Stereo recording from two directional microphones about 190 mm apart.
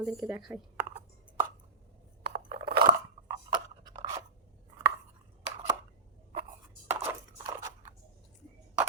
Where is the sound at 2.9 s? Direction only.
20° right (ahead or behind).